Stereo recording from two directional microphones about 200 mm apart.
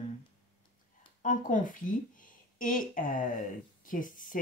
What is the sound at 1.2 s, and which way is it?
A woman's voice, 40° left (ahead or behind).